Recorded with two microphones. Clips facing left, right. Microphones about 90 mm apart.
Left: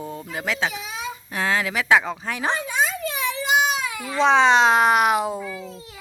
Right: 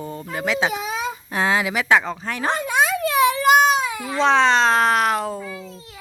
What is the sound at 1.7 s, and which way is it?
Speech, centre (ahead or behind).